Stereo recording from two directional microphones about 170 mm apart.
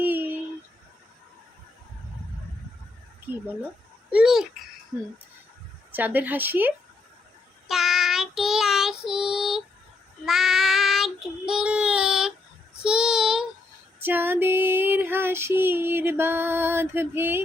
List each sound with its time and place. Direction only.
0.0 s a sound: 10° right (ahead or behind)
4.1 s babbling: 5° right (ahead or behind)
4.9 s female singing: 15° right (ahead or behind)
7.7 s child singing: centre (ahead or behind)
14.0 s female singing: 10° right (ahead or behind)